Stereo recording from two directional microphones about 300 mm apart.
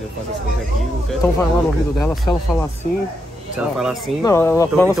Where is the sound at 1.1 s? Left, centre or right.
Centre.